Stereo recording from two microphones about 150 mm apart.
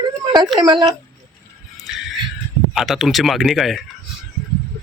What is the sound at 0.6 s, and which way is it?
Speech, 30° right (ahead or behind).